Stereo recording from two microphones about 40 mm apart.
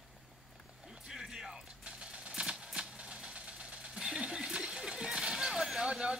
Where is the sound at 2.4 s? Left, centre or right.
Right.